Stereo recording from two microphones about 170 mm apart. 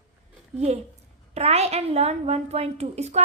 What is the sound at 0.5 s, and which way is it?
A woman's voice, 40° right (ahead or behind).